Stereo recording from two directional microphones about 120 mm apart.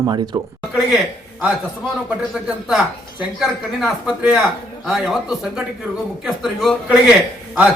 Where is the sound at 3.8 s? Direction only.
5° right (ahead or behind).